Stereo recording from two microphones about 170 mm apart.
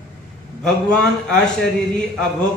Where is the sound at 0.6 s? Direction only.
5° left (ahead or behind).